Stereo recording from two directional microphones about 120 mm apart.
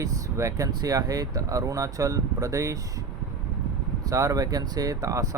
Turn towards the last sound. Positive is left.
turn(degrees=-25)  # may be behind; listen again after turning